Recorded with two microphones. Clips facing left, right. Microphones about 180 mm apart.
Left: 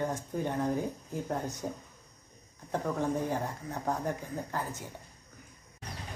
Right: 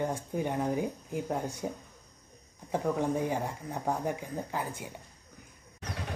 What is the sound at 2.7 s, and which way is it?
Speech, 10° right (ahead or behind).